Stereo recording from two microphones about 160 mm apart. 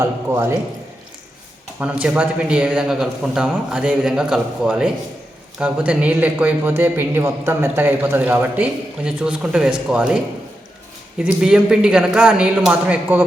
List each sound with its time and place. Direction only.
0.0 s a man's voice: 15° right (ahead or behind)
1.8 s a man's voice: 5° right (ahead or behind)
11.2 s speech: 5° right (ahead or behind)